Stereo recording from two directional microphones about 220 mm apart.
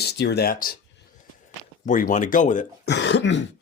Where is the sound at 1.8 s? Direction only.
35° left (ahead or behind).